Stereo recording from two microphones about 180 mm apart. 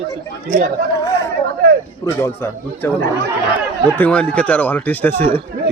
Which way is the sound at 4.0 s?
5° left (ahead or behind).